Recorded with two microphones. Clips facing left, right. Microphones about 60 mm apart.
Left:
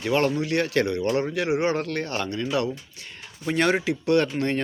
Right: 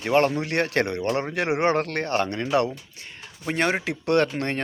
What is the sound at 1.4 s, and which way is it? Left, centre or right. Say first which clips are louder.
Speech: right 1 dB; right.